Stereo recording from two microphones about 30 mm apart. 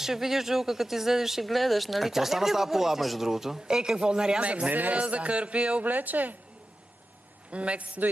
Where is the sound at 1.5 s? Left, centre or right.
Centre.